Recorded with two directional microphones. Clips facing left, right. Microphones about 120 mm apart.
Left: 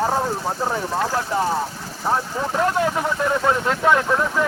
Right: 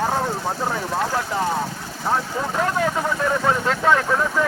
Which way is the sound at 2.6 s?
15° left (ahead or behind).